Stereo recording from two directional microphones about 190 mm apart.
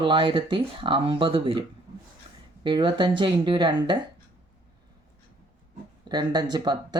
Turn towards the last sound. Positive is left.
turn(degrees=-20)  # may be behind; listen again after turning